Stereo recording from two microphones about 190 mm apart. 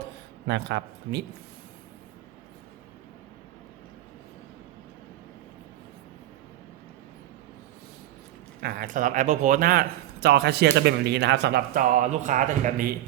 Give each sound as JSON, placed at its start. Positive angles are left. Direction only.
{"t": 0.4, "sound": "a man's voice", "side_deg": -65}
{"t": 8.6, "sound": "speech", "side_deg": -45}